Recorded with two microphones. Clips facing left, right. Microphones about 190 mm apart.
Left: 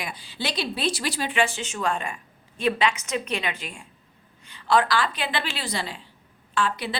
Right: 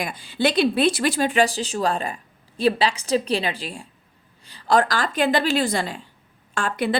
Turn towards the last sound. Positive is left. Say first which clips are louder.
# right 3 dB
turn(degrees=-50)  # may be behind; listen again after turning